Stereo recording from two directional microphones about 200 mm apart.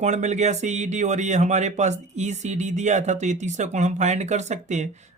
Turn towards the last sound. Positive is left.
turn(degrees=-35)  # may be behind; listen again after turning